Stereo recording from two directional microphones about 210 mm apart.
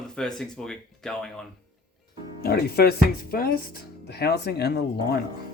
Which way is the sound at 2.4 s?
50° left (ahead or behind).